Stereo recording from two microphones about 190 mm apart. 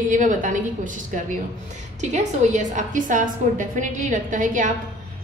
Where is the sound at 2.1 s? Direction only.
40° right (ahead or behind).